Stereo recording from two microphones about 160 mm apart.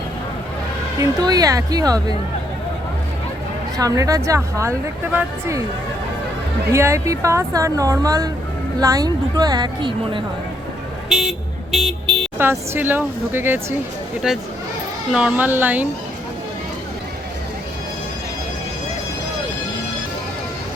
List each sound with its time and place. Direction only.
1.2 s a woman's voice: 25° right (ahead or behind)
3.8 s a woman's voice: 20° right (ahead or behind)
6.7 s a woman's voice: 15° right (ahead or behind)
11.1 s speech: 5° right (ahead or behind)
12.4 s speech: 15° right (ahead or behind)